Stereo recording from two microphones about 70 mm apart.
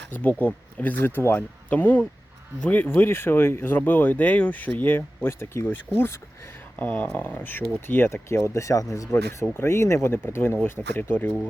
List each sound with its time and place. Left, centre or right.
0.1 s speech: left
1.4 s speech: left
6.7 s speech: left
8.4 s speech: left